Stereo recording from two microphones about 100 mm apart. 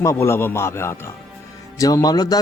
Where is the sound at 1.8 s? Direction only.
40° left (ahead or behind).